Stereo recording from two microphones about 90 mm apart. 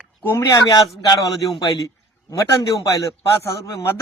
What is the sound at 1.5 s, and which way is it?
Speech, 65° left (ahead or behind).